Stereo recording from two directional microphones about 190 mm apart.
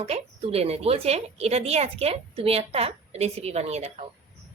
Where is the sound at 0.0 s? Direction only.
30° right (ahead or behind).